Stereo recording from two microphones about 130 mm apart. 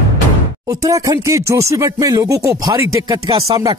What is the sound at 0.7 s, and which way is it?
Speech, 25° right (ahead or behind).